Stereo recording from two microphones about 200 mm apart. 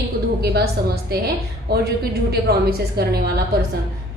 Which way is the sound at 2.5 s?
50° right (ahead or behind).